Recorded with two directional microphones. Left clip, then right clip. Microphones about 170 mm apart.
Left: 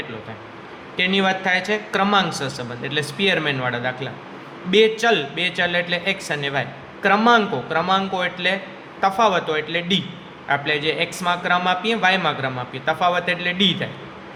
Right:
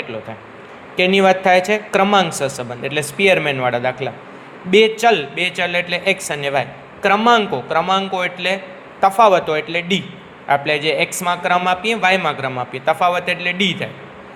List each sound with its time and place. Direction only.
0.9 s a man's voice: 25° right (ahead or behind)